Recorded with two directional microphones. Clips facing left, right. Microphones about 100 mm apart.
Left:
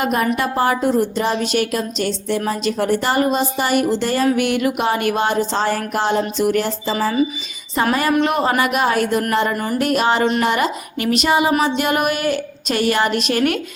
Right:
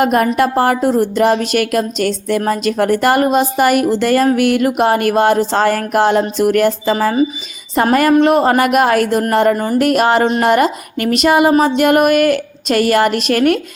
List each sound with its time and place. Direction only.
0.0 s a woman's voice: 50° right (ahead or behind)
6.9 s speech: 45° right (ahead or behind)
9.3 s speech: 40° right (ahead or behind)